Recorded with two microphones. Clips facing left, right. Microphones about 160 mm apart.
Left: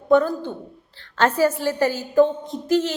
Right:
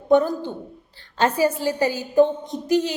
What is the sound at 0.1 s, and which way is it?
A woman's voice, 15° right (ahead or behind).